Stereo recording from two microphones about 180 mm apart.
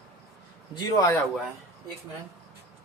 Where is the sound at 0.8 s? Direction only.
25° left (ahead or behind).